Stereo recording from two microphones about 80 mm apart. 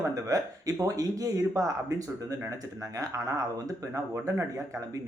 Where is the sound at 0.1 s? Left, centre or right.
Right.